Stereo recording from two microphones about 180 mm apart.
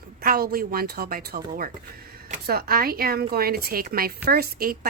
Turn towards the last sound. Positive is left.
turn(degrees=-55)  # may be behind; listen again after turning